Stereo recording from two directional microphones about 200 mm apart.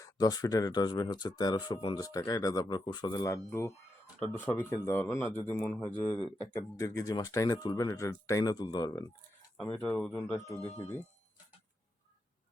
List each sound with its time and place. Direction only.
0.0 s speech: 20° left (ahead or behind)
6.5 s speech: 15° left (ahead or behind)
9.6 s speech: 5° left (ahead or behind)
10.6 s speech: 35° left (ahead or behind)